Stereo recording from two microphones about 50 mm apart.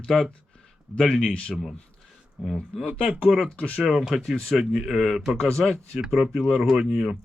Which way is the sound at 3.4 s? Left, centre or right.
Left.